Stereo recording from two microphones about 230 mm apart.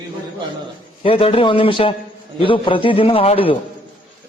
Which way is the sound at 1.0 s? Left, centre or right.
Left.